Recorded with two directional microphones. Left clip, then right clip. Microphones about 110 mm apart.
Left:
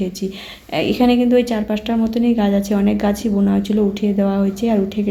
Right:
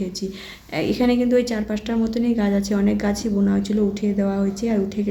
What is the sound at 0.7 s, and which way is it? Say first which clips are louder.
Speech: left 5 dB; 20° left (ahead or behind).